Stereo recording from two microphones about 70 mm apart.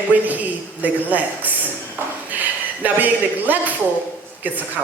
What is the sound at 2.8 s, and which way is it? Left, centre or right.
Speech, right.